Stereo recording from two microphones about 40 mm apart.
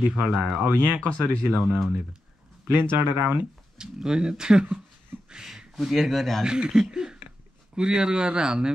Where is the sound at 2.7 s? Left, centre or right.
Right.